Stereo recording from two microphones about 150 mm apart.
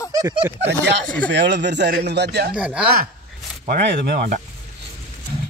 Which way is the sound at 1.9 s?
90° right.